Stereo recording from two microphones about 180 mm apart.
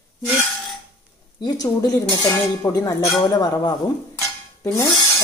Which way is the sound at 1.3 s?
20° left (ahead or behind).